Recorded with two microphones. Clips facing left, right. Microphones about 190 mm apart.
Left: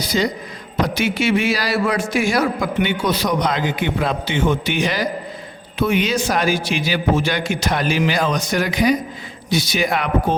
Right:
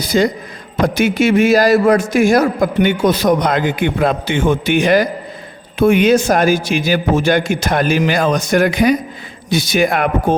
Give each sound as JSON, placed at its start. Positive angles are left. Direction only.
{"t": 0.0, "sound": "a man's voice", "side_deg": -50}